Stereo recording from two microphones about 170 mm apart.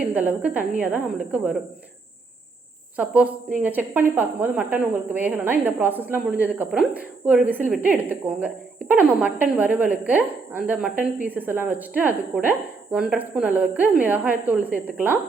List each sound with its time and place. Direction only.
0.0 s a woman's voice: 10° right (ahead or behind)
2.9 s speech: 10° right (ahead or behind)